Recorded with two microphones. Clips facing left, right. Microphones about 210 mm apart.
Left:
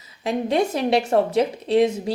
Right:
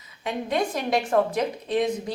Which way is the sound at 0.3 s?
30° left (ahead or behind).